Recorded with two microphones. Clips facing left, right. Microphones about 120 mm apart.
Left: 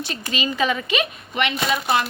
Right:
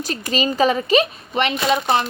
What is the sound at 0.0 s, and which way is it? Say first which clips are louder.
Speech: right 5 dB; 40° right (ahead or behind).